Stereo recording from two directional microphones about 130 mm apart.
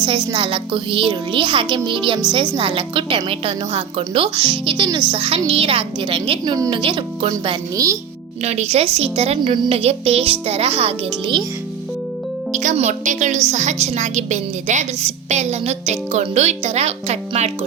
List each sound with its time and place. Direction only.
0.0 s speech: 40° right (ahead or behind)
8.4 s a woman's voice: 55° right (ahead or behind)
12.5 s speech: 75° right (ahead or behind)
12.7 s speech: 65° right (ahead or behind)